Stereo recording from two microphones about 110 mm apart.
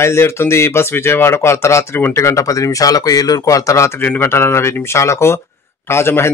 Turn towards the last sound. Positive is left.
turn(degrees=25)  # may be behind; listen again after turning